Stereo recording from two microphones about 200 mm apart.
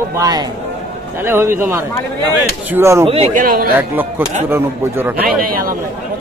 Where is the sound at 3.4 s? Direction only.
50° right (ahead or behind).